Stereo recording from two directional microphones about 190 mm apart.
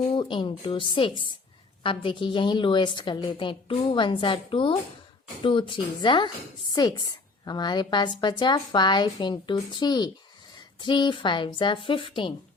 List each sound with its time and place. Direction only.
0.1 s a woman's voice: 25° left (ahead or behind)
7.4 s a woman's voice: 20° left (ahead or behind)